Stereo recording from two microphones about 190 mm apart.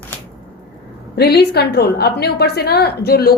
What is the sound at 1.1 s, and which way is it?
A woman's voice, 55° left (ahead or behind).